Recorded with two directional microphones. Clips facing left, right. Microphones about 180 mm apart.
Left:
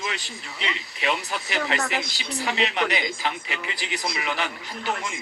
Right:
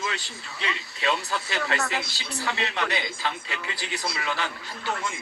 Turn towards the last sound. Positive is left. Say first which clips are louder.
# left 1 dB
turn(degrees=15)  # may be behind; listen again after turning